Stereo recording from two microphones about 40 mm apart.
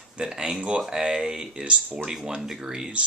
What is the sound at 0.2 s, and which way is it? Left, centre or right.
Speech, right.